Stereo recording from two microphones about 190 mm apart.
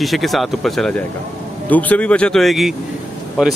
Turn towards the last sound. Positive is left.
turn(degrees=-5)  # may be behind; listen again after turning